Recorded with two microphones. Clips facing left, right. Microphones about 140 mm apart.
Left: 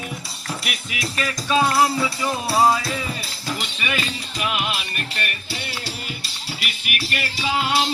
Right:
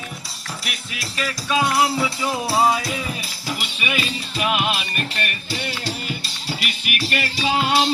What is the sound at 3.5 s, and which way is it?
Music, 10° right (ahead or behind).